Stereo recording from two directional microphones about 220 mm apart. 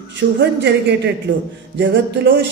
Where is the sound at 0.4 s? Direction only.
50° right (ahead or behind).